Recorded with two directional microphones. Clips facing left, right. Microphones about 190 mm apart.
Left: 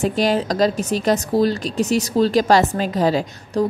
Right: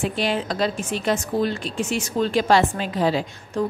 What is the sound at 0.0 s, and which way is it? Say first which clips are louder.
A woman's voice: left 5 dB; 40° left (ahead or behind).